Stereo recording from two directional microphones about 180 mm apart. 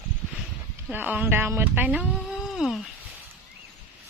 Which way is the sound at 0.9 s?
10° right (ahead or behind).